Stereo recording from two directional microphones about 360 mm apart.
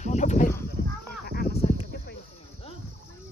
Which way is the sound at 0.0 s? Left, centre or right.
Centre.